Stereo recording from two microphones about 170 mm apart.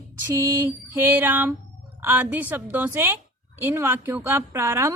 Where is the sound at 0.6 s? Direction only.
10° right (ahead or behind).